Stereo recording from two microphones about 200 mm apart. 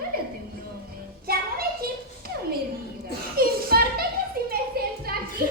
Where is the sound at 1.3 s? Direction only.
50° right (ahead or behind).